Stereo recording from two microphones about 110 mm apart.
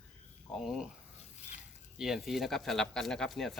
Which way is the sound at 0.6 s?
Centre (ahead or behind).